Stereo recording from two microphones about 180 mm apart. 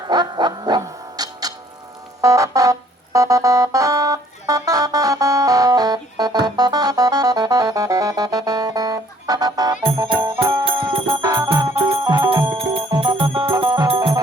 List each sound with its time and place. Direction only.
0.1 s music: 25° right (ahead or behind)
10.2 s music: 15° right (ahead or behind)
10.4 s music: 30° right (ahead or behind)
11.2 s music: 15° right (ahead or behind)
12.0 s jingle bell: 20° right (ahead or behind)
12.5 s music: 30° right (ahead or behind)